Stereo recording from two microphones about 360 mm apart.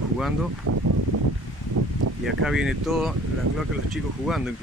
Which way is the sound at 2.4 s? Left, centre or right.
Centre.